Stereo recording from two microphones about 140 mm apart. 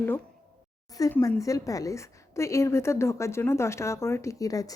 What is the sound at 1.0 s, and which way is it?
A woman's voice, 25° left (ahead or behind).